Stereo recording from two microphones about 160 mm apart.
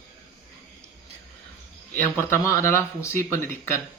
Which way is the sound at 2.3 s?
15° left (ahead or behind).